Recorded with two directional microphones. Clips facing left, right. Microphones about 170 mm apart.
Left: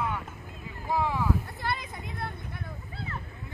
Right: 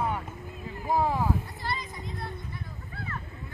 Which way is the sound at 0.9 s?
40° right (ahead or behind).